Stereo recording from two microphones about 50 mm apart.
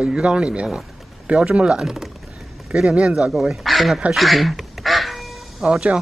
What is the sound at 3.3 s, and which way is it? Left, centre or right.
Speech, centre.